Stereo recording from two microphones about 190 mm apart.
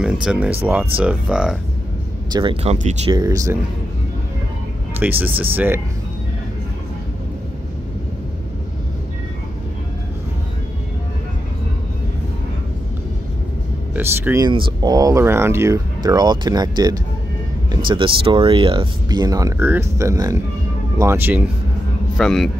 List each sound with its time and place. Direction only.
0.0 s speech: 5° right (ahead or behind)
2.3 s speech: 30° right (ahead or behind)
3.1 s speech: 20° right (ahead or behind)
5.0 s speech: 10° right (ahead or behind)
13.9 s speech: 10° right (ahead or behind)